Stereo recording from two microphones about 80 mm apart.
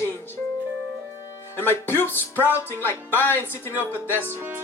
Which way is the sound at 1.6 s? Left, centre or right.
Left.